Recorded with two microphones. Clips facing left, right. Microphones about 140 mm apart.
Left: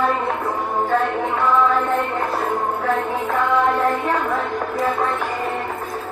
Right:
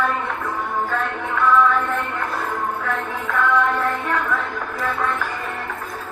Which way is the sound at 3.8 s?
35° left (ahead or behind).